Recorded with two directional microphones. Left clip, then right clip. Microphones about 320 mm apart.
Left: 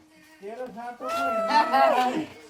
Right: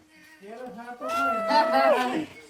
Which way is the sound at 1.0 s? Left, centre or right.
Centre.